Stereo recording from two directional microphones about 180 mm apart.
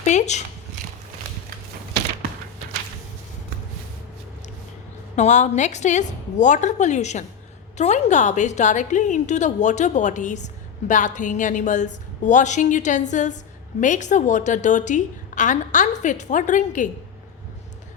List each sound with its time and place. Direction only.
0.0 s speech: 40° left (ahead or behind)
5.1 s a woman's voice: 40° left (ahead or behind)